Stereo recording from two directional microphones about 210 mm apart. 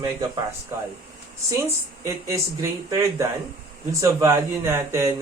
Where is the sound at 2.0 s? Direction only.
15° right (ahead or behind).